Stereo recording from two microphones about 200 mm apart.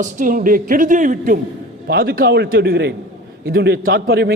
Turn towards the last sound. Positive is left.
turn(degrees=-55)  # may be behind; listen again after turning